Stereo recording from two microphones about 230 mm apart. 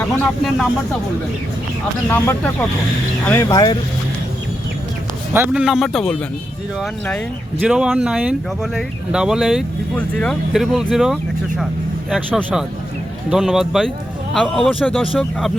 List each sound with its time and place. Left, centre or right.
0.0 s speech: centre
2.0 s speech: centre
5.3 s speech: centre
7.6 s speech: centre